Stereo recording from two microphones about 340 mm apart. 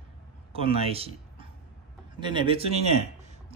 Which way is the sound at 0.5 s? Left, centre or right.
Centre.